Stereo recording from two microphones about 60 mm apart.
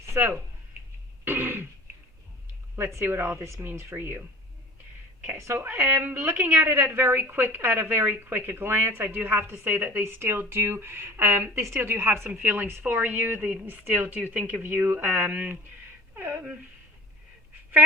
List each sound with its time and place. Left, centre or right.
0.2 s a woman's voice: right
1.2 s throat clearing: right
2.9 s a woman's voice: right
5.4 s speech: right
6.0 s a woman's voice: right
12.3 s a woman's voice: right